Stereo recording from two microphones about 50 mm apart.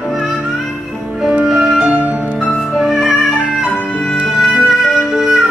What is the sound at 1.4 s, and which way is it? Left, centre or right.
Music, centre.